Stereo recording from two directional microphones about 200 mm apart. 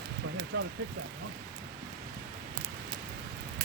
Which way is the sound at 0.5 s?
60° right (ahead or behind).